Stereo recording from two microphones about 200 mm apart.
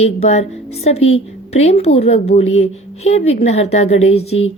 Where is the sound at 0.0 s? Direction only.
35° left (ahead or behind).